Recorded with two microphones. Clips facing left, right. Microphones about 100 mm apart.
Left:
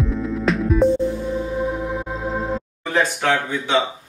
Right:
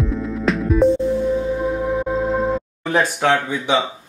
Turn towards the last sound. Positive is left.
turn(degrees=-15)  # may be behind; listen again after turning